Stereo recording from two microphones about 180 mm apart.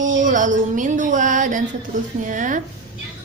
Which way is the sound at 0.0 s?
45° right (ahead or behind).